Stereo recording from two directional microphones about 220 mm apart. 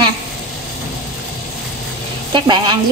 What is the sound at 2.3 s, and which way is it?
Stir, 20° right (ahead or behind).